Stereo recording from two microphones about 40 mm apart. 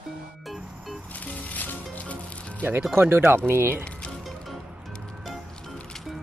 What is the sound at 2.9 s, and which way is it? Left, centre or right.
Speech, right.